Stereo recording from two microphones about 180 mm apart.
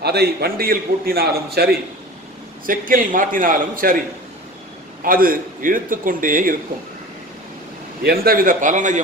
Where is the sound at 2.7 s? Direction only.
50° right (ahead or behind).